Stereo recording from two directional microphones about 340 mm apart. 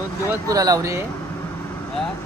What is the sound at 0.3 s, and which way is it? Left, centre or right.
Speech, centre.